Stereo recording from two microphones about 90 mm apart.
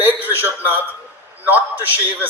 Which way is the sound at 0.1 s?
20° right (ahead or behind).